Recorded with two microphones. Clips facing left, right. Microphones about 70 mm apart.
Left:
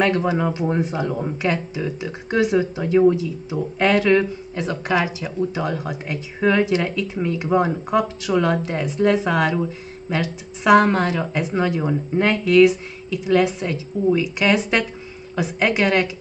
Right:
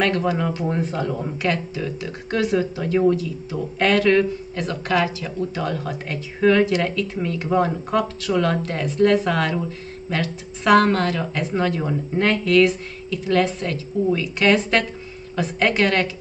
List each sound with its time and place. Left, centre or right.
0.0 s speech: left